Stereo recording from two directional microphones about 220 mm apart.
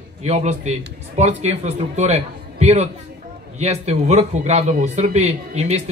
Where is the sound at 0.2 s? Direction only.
30° right (ahead or behind).